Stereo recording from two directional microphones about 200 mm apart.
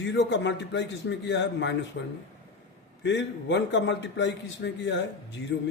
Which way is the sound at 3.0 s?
60° left (ahead or behind).